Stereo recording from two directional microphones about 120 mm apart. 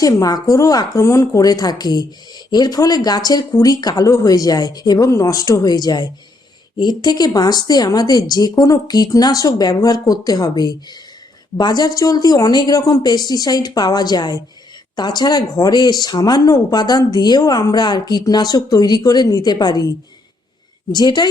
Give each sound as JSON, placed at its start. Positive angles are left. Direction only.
{"t": 0.0, "sound": "a woman's voice", "side_deg": 30}
{"t": 20.9, "sound": "a woman's voice", "side_deg": 35}